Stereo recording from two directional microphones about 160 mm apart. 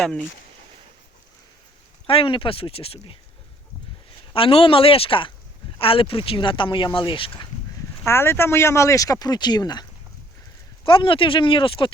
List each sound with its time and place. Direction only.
0.0 s speech: 5° left (ahead or behind)
2.0 s speech: 35° left (ahead or behind)
4.4 s speech: 35° left (ahead or behind)
8.0 s speech: 15° left (ahead or behind)
10.8 s speech: 30° left (ahead or behind)